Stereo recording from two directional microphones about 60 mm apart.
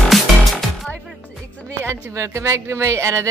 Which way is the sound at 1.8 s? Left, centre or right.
Right.